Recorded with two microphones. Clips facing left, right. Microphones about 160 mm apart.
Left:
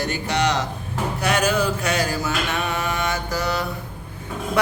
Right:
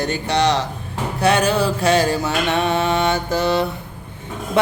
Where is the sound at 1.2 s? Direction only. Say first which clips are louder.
Right 5 dB; 30° right (ahead or behind).